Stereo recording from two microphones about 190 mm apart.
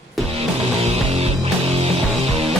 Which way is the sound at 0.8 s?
35° right (ahead or behind).